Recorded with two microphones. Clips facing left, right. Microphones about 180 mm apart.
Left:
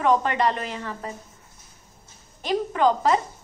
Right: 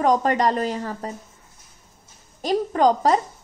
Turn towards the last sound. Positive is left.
turn(degrees=-40)  # may be behind; listen again after turning